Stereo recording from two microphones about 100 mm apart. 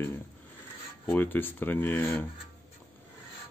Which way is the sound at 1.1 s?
20° left (ahead or behind).